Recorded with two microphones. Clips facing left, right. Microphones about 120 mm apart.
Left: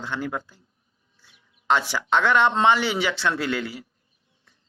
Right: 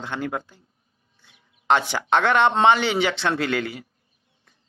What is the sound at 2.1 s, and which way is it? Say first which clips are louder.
Speech: right 1 dB; 60° right (ahead or behind).